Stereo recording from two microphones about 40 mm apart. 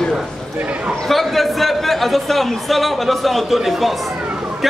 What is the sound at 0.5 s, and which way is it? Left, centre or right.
Speech, right.